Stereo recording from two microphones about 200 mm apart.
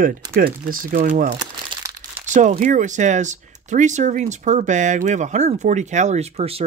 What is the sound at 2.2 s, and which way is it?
Speech, 40° right (ahead or behind).